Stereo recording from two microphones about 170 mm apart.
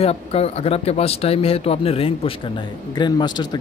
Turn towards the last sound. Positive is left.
turn(degrees=25)  # may be behind; listen again after turning